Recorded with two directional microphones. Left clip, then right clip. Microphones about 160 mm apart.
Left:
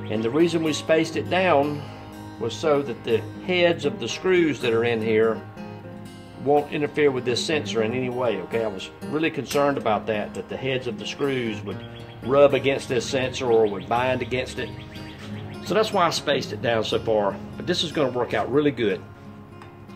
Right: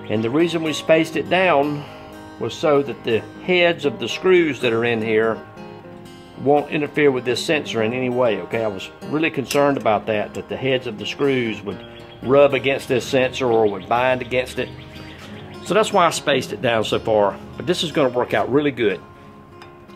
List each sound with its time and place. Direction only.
0.1 s speech: 70° right (ahead or behind)
2.6 s speech: 60° right (ahead or behind)
6.7 s speech: 65° right (ahead or behind)
11.2 s speech: centre (ahead or behind)
12.3 s speech: 65° right (ahead or behind)
15.7 s speech: 60° right (ahead or behind)